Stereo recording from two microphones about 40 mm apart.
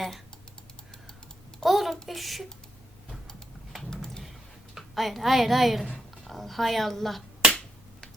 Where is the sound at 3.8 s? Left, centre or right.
Centre.